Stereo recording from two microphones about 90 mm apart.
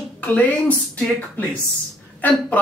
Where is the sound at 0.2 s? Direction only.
15° left (ahead or behind).